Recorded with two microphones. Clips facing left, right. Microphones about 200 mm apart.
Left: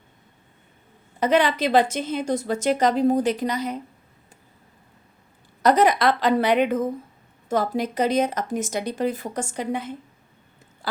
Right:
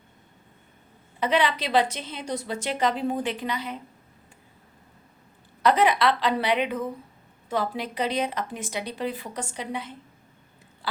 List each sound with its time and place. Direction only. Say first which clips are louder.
1.2 s a woman's voice: left 4 dB; 45° left (ahead or behind)
5.6 s a woman's voice: left 3 dB; 40° left (ahead or behind)